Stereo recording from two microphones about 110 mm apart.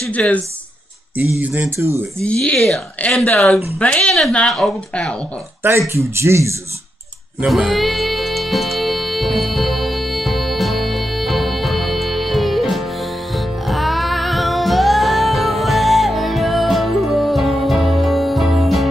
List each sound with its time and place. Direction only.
0.1 s speech: 10° left (ahead or behind)
1.4 s speech: 15° right (ahead or behind)
2.1 s speech: 10° left (ahead or behind)
5.6 s speech: 25° right (ahead or behind)
7.4 s music: centre (ahead or behind)